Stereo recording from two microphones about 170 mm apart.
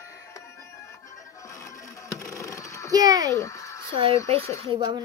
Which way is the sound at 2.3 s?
20° left (ahead or behind).